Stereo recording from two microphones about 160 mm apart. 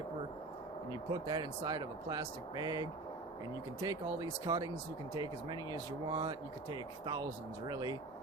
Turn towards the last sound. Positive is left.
turn(degrees=-25)  # may be behind; listen again after turning